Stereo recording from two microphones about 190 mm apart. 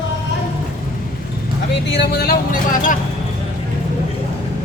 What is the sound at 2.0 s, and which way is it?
Speech, 55° left (ahead or behind).